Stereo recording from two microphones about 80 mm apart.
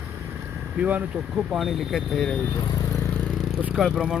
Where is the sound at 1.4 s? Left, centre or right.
Centre.